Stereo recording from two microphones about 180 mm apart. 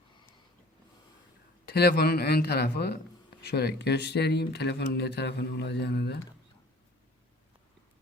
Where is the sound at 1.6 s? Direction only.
65° left (ahead or behind).